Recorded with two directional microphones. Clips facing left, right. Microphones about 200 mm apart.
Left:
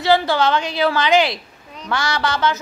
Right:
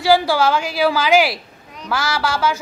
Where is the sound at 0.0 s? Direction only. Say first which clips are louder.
Right 1 dB; 10° right (ahead or behind).